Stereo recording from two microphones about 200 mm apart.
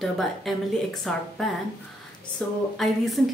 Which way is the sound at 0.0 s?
Centre (ahead or behind).